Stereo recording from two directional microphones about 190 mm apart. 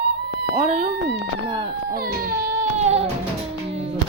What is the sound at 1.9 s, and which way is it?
Baby cry, 50° right (ahead or behind).